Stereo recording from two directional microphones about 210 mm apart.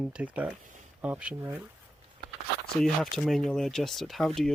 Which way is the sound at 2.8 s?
Centre (ahead or behind).